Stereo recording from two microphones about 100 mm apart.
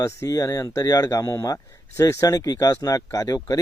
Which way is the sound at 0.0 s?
35° left (ahead or behind).